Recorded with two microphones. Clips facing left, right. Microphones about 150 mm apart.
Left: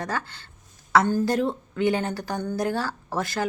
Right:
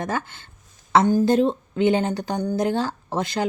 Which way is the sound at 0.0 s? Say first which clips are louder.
Right 3 dB; 20° right (ahead or behind).